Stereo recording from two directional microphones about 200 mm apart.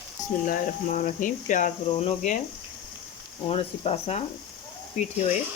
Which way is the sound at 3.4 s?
30° left (ahead or behind).